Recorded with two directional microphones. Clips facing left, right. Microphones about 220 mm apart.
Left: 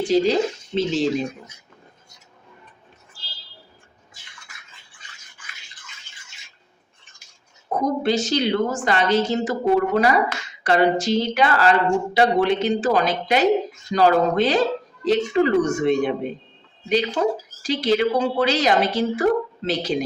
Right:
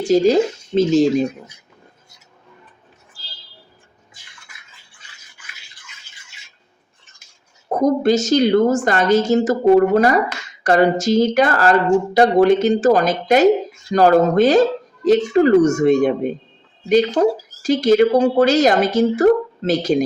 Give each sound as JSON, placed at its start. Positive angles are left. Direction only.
{"t": 0.0, "sound": "speech", "side_deg": -45}
{"t": 7.8, "sound": "speech", "side_deg": -45}